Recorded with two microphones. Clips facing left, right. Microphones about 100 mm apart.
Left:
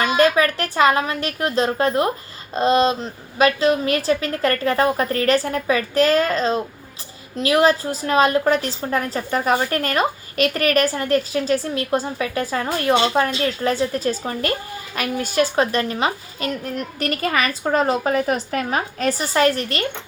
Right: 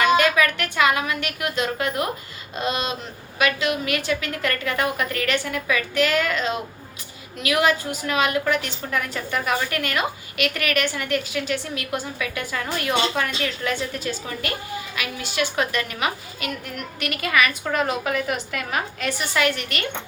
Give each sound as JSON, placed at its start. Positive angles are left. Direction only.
{"t": 0.0, "sound": "a woman's voice", "side_deg": 35}